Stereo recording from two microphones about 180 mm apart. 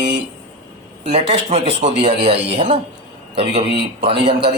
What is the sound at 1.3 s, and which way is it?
Speech, 35° right (ahead or behind).